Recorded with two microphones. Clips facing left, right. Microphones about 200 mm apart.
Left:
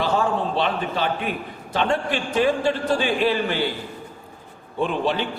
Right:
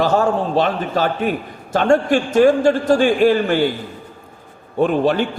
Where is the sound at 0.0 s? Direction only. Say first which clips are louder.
Right 5 dB; 45° right (ahead or behind).